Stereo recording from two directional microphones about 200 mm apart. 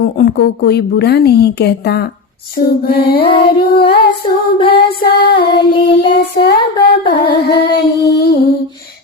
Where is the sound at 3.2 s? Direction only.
30° left (ahead or behind).